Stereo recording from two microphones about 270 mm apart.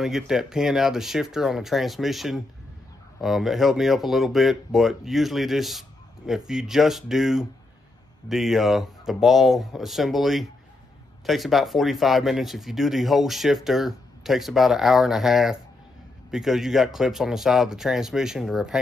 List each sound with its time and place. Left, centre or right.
0.0 s speech: centre